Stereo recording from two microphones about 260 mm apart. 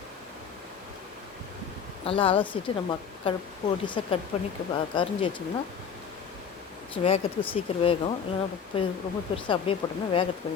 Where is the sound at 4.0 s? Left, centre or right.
Left.